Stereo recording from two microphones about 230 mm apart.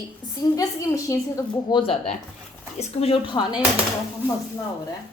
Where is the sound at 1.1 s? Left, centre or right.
Centre.